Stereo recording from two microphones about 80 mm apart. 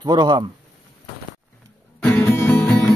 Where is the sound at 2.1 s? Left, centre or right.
Left.